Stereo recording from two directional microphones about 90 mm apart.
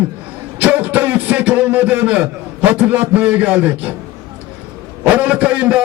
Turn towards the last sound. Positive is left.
turn(degrees=-15)  # may be behind; listen again after turning